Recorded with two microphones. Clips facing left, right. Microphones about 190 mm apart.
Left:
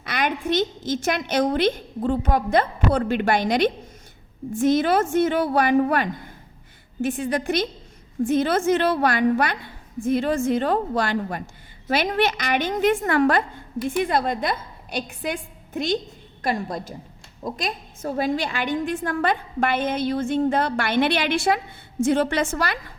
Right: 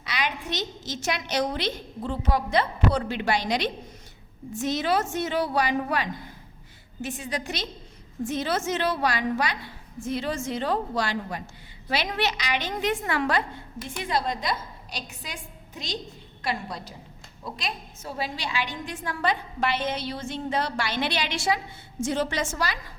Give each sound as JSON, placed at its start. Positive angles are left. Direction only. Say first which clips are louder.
{"t": 0.0, "sound": "a woman's voice", "louder": "left 6 dB", "side_deg": 55}